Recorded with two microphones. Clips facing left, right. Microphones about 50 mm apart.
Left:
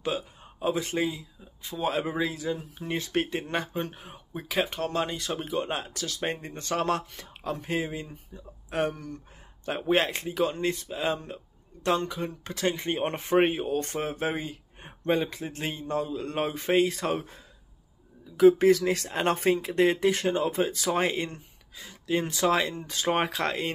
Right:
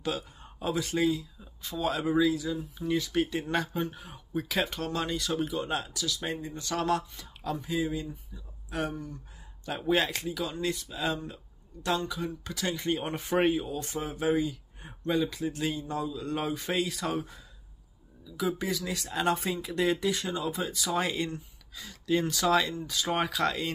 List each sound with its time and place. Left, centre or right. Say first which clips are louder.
0.0 s a sound: left 2 dB; left
0.9 s speech: right 2 dB; left
7.6 s speech: right 1 dB; left
8.9 s speech: right 1 dB; left
9.7 s speech: left 2 dB; left